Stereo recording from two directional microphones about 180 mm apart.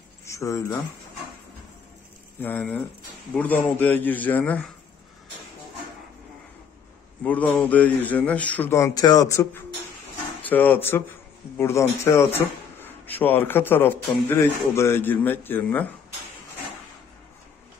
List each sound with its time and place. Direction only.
0.2 s speech: 15° left (ahead or behind)
2.4 s speech: 10° left (ahead or behind)
7.2 s speech: 10° left (ahead or behind)